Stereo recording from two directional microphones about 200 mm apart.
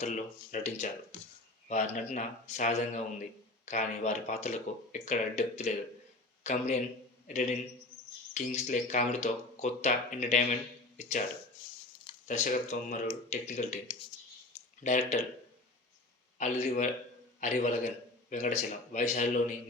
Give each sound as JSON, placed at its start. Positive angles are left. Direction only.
{"t": 0.0, "sound": "a man's voice", "side_deg": 35}
{"t": 8.3, "sound": "speech", "side_deg": 35}
{"t": 12.3, "sound": "speech", "side_deg": 40}
{"t": 14.8, "sound": "speech", "side_deg": 35}
{"t": 16.4, "sound": "a man's voice", "side_deg": 35}